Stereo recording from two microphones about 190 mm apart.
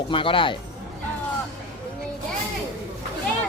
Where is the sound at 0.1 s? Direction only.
25° left (ahead or behind).